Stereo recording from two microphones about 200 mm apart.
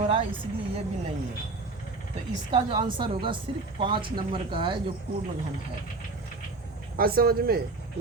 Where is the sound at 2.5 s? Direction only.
25° right (ahead or behind).